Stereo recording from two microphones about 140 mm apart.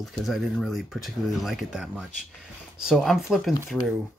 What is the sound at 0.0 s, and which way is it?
Speech, centre (ahead or behind).